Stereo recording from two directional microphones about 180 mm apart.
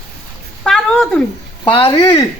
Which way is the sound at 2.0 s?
20° left (ahead or behind).